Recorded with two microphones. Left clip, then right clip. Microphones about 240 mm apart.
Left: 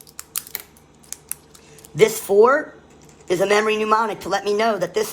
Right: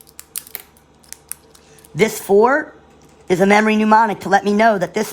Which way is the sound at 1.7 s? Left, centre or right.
Right.